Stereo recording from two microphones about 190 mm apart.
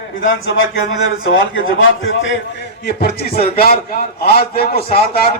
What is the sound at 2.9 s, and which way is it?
A man's voice, 55° left (ahead or behind).